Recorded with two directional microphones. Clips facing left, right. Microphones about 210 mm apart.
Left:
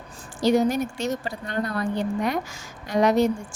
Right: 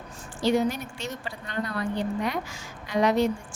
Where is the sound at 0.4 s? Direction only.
40° left (ahead or behind).